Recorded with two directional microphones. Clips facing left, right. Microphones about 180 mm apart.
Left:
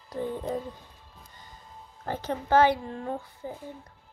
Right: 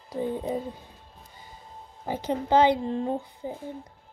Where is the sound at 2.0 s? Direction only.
15° right (ahead or behind).